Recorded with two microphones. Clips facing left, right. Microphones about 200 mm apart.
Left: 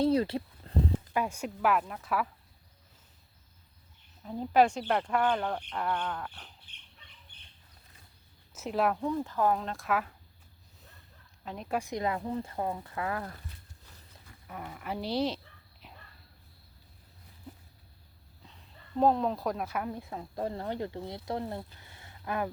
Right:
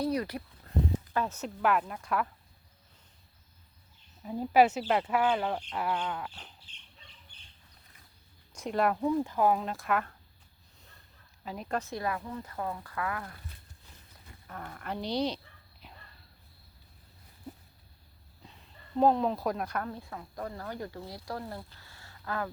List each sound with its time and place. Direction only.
0.0 s a sound: 25° left (ahead or behind)
1.1 s speech: 10° left (ahead or behind)
4.2 s speech: 5° right (ahead or behind)
8.5 s speech: 5° left (ahead or behind)
11.4 s speech: centre (ahead or behind)
11.8 s speech: 15° left (ahead or behind)
14.4 s speech: 10° left (ahead or behind)
15.8 s a sound: centre (ahead or behind)
18.9 s speech: centre (ahead or behind); by 22.4 s 20° left (ahead or behind)